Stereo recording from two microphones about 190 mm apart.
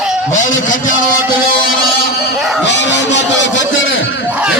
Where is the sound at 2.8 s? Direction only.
70° left (ahead or behind); by 4.3 s 85° left.